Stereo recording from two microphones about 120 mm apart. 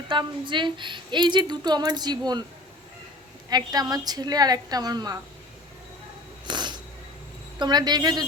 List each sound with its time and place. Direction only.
0.1 s a woman's voice: 40° right (ahead or behind)
3.5 s a woman's voice: 35° right (ahead or behind)
6.5 s a sound: 40° right (ahead or behind)
7.6 s a woman's voice: 35° right (ahead or behind)